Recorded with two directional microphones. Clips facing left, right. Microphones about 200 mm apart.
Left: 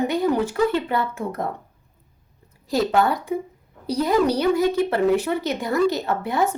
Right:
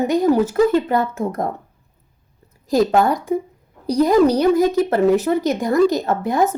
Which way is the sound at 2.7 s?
45° right (ahead or behind).